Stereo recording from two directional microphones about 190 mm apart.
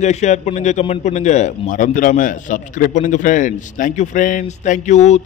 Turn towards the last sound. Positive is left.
turn(degrees=40)  # may be behind; listen again after turning